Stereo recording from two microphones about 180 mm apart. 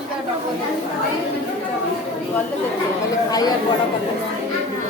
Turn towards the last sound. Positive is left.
turn(degrees=20)  # may be behind; listen again after turning